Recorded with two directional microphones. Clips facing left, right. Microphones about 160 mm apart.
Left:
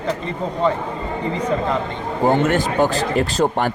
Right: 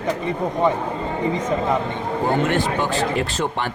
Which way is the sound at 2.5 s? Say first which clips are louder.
Left 3 dB; 40° left (ahead or behind).